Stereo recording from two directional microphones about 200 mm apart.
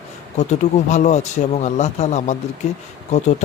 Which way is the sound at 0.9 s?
35° left (ahead or behind).